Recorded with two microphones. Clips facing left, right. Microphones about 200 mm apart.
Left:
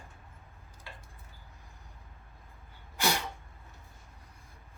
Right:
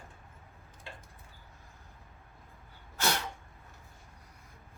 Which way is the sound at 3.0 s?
10° left (ahead or behind).